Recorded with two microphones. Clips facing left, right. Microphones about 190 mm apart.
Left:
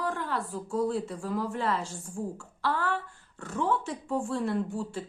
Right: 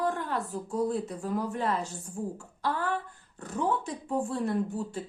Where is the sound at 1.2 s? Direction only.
45° right (ahead or behind).